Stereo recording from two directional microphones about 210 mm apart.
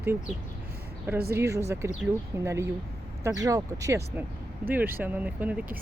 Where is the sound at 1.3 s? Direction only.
10° right (ahead or behind).